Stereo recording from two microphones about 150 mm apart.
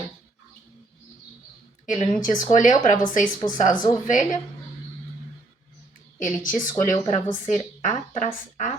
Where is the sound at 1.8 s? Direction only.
60° left (ahead or behind).